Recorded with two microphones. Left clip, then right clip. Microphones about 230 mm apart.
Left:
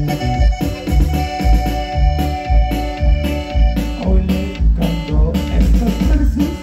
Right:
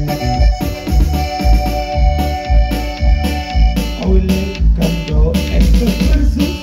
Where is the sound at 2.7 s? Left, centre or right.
Right.